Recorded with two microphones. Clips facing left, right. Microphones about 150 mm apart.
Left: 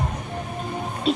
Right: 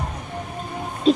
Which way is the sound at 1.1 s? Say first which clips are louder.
Right 6 dB; 40° right (ahead or behind).